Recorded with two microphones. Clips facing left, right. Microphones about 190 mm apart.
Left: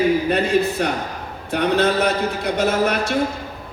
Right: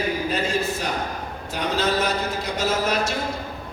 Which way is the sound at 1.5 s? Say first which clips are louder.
Left 6 dB; 60° left (ahead or behind).